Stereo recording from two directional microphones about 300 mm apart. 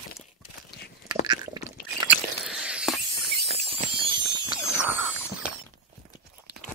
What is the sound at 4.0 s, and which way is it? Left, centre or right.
Ratchet, centre.